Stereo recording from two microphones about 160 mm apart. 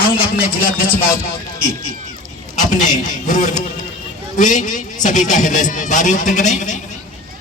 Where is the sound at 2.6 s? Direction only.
50° left (ahead or behind).